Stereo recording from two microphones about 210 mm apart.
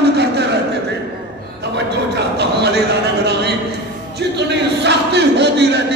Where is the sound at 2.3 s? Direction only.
50° right (ahead or behind).